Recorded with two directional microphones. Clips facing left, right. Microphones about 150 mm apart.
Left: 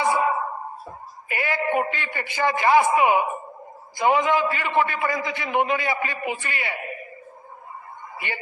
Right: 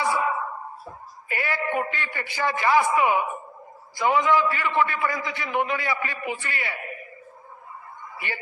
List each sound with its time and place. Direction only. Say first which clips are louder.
0.0 s a sound: left 3 dB; 25° left (ahead or behind)
1.3 s a man's voice: left 3 dB; 20° left (ahead or behind)
8.1 s a woman's voice: left 1 dB; 20° left (ahead or behind)